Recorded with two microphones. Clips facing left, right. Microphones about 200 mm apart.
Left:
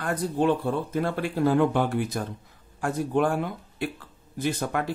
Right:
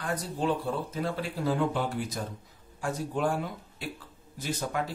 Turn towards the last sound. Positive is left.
turn(degrees=60)  # may be behind; listen again after turning